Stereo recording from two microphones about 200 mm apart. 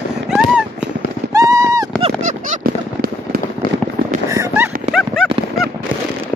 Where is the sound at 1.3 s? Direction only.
15° right (ahead or behind).